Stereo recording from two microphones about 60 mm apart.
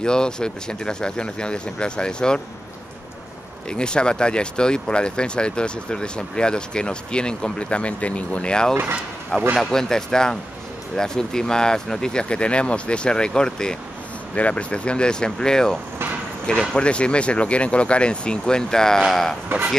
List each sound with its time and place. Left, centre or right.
0.0 s speech: centre
3.6 s speech: centre